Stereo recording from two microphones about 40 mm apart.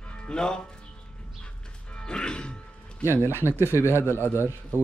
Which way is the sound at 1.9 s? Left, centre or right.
Left.